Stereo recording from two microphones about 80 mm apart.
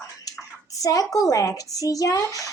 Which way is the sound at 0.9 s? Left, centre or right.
Left.